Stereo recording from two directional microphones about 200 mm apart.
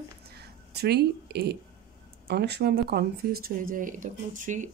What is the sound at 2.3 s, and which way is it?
Speech, 55° right (ahead or behind).